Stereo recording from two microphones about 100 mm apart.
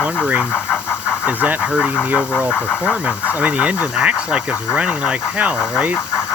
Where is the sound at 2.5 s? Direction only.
20° left (ahead or behind).